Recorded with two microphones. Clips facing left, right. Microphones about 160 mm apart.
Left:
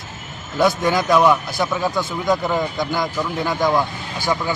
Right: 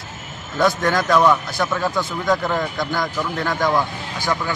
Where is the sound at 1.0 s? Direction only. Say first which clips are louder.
Left 1 dB; 15° left (ahead or behind).